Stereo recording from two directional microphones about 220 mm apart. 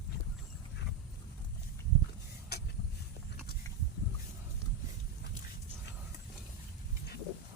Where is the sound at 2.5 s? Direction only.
45° left (ahead or behind).